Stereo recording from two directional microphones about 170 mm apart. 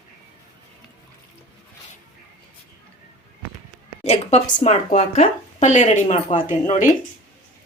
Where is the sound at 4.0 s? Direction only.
40° left (ahead or behind).